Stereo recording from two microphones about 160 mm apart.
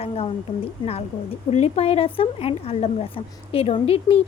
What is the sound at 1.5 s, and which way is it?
Speech, 40° left (ahead or behind).